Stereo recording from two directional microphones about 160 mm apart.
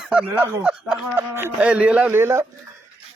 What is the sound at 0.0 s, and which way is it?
A man's voice, 5° right (ahead or behind).